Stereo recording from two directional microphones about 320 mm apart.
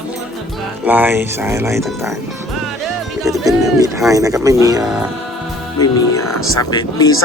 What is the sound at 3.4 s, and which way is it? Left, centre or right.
Speech, centre.